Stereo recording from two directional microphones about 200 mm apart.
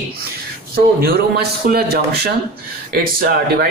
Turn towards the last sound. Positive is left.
turn(degrees=-50)  # may be behind; listen again after turning